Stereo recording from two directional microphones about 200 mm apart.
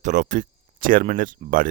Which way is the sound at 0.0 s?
40° right (ahead or behind).